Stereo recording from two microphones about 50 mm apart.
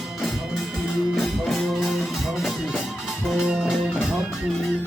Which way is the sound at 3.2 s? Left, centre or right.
Centre.